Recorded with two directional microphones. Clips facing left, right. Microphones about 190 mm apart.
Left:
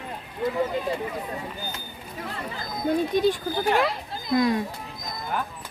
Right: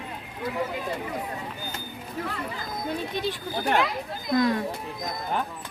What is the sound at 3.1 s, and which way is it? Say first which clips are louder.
Speech: left 8 dB; 45° left (ahead or behind).